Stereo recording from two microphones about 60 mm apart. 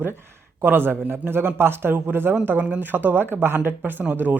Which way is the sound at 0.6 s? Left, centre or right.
Right.